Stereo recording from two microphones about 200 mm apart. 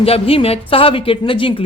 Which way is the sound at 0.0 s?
30° left (ahead or behind).